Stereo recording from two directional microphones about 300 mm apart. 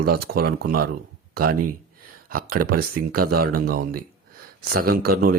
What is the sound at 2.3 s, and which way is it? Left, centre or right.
Speech, right.